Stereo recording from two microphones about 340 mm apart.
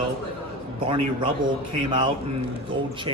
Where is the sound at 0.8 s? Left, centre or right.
Centre.